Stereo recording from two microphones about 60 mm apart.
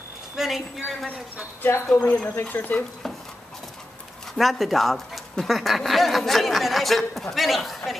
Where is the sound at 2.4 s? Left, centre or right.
Left.